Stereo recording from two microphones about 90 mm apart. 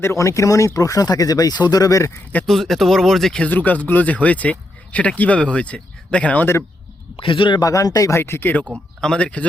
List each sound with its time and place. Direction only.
0.0 s speech: 35° left (ahead or behind)
2.5 s speech: 5° left (ahead or behind)
3.4 s speech: 15° left (ahead or behind)
7.2 s a man's voice: 70° left (ahead or behind)
7.6 s speech: 40° left (ahead or behind)
8.2 s speech: 25° left (ahead or behind)
9.0 s speech: 10° left (ahead or behind)